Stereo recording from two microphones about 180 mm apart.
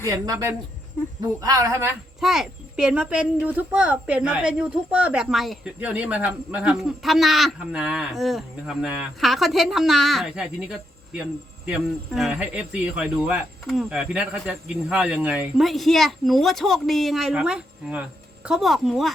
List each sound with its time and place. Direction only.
0.0 s speech: 20° right (ahead or behind)
2.2 s speech: centre (ahead or behind)